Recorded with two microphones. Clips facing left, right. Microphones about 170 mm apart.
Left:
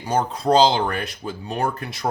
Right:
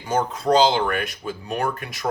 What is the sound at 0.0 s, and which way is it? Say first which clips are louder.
Speech: left 1 dB; 35° left (ahead or behind).